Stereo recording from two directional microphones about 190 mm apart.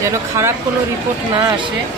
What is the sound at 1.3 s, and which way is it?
Speech, 25° right (ahead or behind).